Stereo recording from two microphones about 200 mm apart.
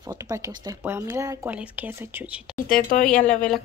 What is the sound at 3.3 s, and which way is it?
Speech, 5° left (ahead or behind).